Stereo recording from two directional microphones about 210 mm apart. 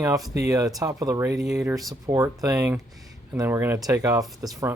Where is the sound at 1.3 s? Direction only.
Centre (ahead or behind).